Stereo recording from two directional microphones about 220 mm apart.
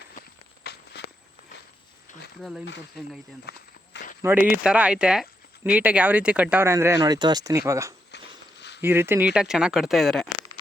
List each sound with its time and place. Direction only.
0.6 s walk: 45° left (ahead or behind)
2.4 s speech: centre (ahead or behind)
3.5 s speech: 45° left (ahead or behind)
4.2 s speech: 10° right (ahead or behind)
8.1 s walk: 50° left (ahead or behind)
8.8 s speech: 10° right (ahead or behind)